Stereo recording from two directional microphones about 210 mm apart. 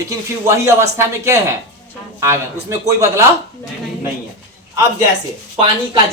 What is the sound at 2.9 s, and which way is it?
Speech, 15° right (ahead or behind).